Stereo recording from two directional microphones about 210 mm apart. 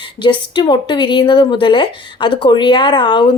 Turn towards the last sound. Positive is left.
turn(degrees=20)  # may be behind; listen again after turning